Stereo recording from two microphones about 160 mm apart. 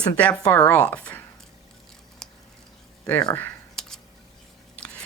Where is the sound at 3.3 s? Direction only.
5° left (ahead or behind).